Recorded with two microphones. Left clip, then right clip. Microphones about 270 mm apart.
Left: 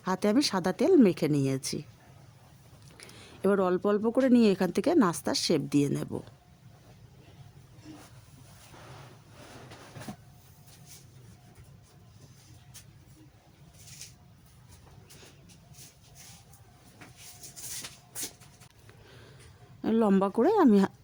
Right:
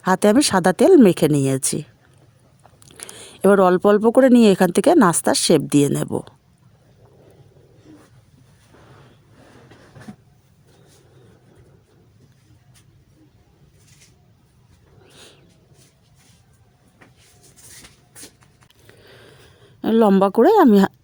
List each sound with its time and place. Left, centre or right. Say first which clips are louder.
0.0 s speech: right 11 dB; right
3.0 s speech: right 12 dB; right
18.9 s a sound: right 10 dB; centre
19.8 s speech: right 11 dB; right